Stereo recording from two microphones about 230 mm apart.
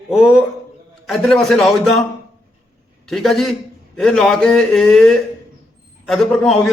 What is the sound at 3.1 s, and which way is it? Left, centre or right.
A man's voice, centre.